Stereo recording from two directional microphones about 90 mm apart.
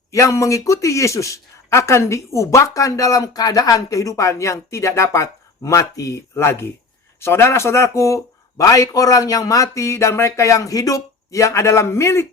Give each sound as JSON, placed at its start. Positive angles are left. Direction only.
{"t": 0.1, "sound": "speech", "side_deg": 35}